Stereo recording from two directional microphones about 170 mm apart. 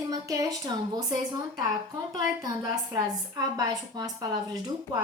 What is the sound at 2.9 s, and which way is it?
A woman's voice, 20° right (ahead or behind).